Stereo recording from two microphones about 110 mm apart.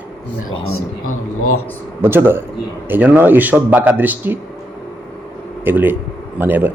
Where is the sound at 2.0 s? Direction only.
20° right (ahead or behind).